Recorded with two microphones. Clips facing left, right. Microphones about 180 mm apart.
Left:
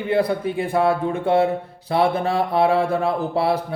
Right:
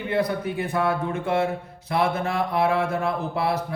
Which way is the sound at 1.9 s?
30° left (ahead or behind).